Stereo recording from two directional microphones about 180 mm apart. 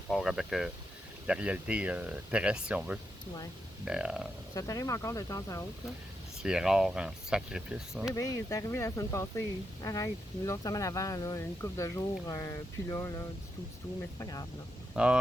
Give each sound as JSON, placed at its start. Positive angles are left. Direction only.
{"t": 0.1, "sound": "speech", "side_deg": 0}
{"t": 4.5, "sound": "speech", "side_deg": 20}
{"t": 6.4, "sound": "speech", "side_deg": -5}
{"t": 8.1, "sound": "speech", "side_deg": 20}
{"t": 14.9, "sound": "speech", "side_deg": -5}